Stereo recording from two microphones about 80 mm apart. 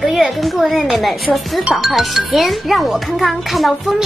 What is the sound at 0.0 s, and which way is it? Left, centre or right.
A child's voice, centre.